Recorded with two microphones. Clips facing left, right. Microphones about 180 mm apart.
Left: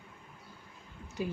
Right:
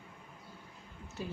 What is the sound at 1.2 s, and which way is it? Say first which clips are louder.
Speech: left 5 dB; 15° left (ahead or behind).